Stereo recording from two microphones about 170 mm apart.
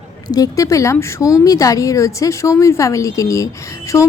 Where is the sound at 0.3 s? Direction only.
20° left (ahead or behind).